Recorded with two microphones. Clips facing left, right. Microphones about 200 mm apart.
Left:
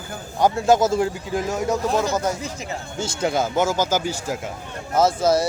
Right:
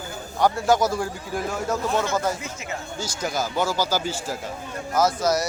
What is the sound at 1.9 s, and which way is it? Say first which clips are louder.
Speech: left 2 dB; 35° left (ahead or behind).